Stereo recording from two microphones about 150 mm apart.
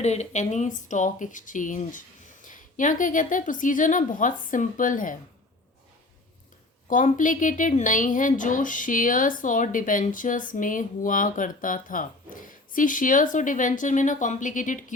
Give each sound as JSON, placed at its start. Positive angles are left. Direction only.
{"t": 0.0, "sound": "speech", "side_deg": 50}
{"t": 6.8, "sound": "speech", "side_deg": 60}